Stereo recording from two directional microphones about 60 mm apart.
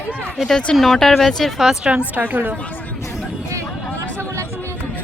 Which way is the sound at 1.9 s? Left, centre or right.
Right.